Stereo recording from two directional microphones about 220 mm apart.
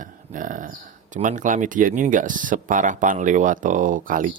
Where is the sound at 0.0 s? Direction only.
35° right (ahead or behind).